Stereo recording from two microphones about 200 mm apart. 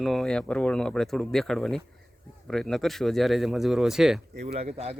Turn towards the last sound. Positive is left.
turn(degrees=-30)  # may be behind; listen again after turning